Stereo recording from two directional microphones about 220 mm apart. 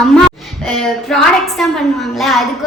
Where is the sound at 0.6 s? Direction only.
Centre (ahead or behind).